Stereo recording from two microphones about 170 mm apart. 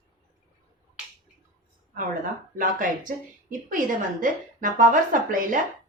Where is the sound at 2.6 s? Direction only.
50° right (ahead or behind).